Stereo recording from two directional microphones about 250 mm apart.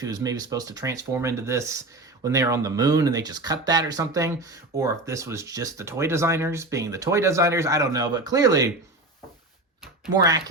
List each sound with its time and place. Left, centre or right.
0.0 s speech: centre